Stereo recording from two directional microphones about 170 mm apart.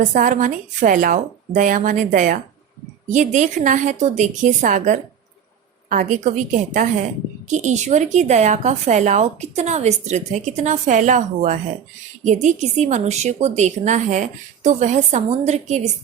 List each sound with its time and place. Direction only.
0.0 s a woman's voice: 50° right (ahead or behind)